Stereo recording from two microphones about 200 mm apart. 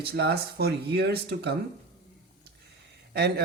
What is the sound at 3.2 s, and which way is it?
Speech, 55° right (ahead or behind).